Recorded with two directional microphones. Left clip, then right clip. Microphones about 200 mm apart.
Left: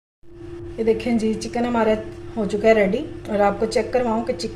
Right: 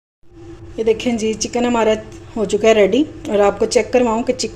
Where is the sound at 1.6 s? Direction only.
45° right (ahead or behind).